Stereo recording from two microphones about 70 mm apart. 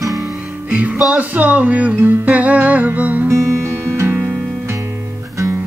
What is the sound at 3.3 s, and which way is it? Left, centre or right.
Music, right.